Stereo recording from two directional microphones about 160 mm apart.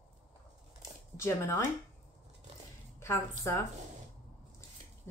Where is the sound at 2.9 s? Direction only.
15° left (ahead or behind).